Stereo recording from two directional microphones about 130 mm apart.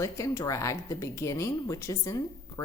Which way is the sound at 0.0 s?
25° left (ahead or behind).